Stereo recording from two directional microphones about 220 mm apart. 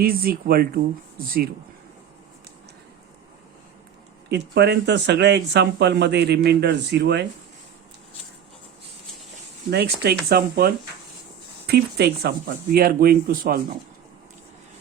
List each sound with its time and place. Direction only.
0.0 s speech: 40° right (ahead or behind)
4.3 s speech: 50° right (ahead or behind)
9.6 s speech: 50° right (ahead or behind)